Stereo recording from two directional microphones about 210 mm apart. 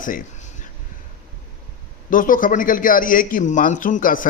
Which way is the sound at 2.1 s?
40° left (ahead or behind).